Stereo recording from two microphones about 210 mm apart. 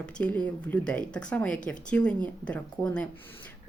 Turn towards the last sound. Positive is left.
turn(degrees=5)  # may be behind; listen again after turning